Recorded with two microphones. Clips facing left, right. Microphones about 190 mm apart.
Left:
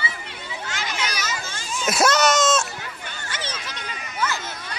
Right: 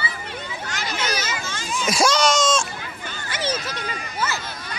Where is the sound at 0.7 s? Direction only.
40° right (ahead or behind).